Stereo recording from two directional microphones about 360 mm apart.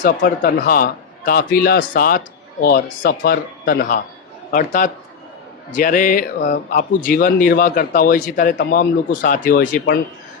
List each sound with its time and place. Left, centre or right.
0.0 s speech: left